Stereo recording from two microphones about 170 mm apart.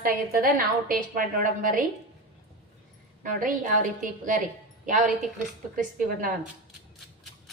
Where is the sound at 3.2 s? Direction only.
50° right (ahead or behind).